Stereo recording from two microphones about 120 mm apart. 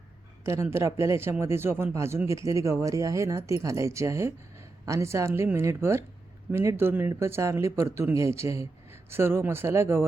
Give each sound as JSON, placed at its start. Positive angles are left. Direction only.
{"t": 0.4, "sound": "speech", "side_deg": -20}